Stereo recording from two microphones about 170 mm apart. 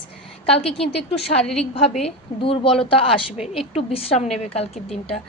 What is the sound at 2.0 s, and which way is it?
Speech, 35° left (ahead or behind).